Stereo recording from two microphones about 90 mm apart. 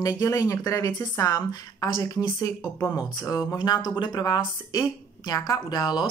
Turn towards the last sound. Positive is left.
turn(degrees=50)  # may be behind; listen again after turning